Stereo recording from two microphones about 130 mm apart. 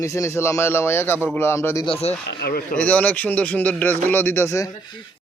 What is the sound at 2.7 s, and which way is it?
Speech, 10° left (ahead or behind).